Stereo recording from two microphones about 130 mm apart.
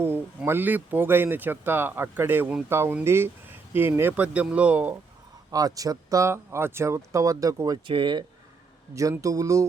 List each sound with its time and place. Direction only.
0.0 s speech: 15° right (ahead or behind)
5.5 s speech: 30° right (ahead or behind)
7.9 s speech: 40° right (ahead or behind)
9.0 s speech: 25° right (ahead or behind)